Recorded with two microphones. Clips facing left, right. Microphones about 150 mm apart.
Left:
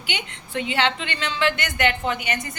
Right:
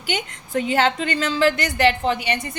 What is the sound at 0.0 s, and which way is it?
A woman's voice, 45° right (ahead or behind).